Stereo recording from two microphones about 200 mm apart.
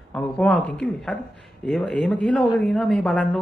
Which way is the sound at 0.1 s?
Centre (ahead or behind).